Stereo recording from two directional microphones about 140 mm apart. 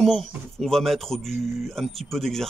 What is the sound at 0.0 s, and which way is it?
Speech, centre (ahead or behind).